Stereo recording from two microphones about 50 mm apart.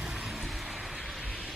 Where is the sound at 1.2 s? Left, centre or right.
Right.